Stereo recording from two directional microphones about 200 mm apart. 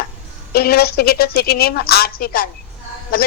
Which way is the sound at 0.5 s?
50° left (ahead or behind).